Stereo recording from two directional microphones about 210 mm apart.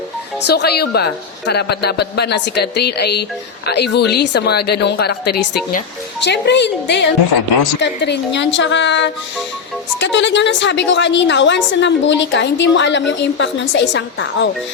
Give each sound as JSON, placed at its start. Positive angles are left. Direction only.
{"t": 0.4, "sound": "a woman's voice", "side_deg": 50}